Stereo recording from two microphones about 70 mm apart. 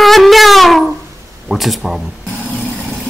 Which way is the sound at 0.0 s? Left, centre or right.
Centre.